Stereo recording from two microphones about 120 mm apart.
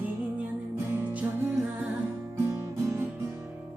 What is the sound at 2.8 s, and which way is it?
Guitar, 25° right (ahead or behind).